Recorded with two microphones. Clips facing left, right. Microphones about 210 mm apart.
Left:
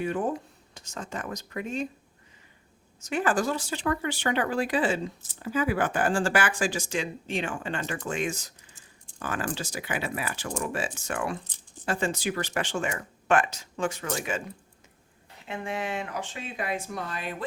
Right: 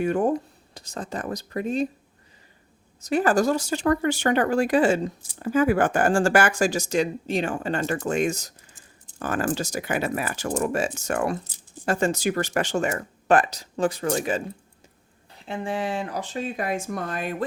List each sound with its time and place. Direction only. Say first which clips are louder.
0.0 s speech: right 6 dB; 45° right (ahead or behind)
3.0 s speech: right 6 dB; 35° right (ahead or behind)
15.4 s speech: right 4 dB; 30° right (ahead or behind); by 17.3 s 50° right (ahead or behind)